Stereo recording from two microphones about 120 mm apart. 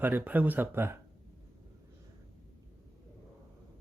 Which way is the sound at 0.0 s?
15° right (ahead or behind).